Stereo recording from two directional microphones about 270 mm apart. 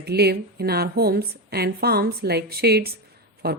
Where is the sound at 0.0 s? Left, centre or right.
Right.